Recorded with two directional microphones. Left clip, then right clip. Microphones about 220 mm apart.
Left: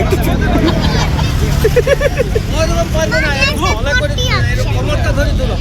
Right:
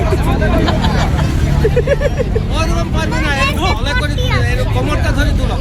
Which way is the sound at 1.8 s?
50° left (ahead or behind).